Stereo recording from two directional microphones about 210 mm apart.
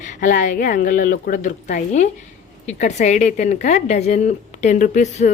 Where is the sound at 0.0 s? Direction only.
35° left (ahead or behind).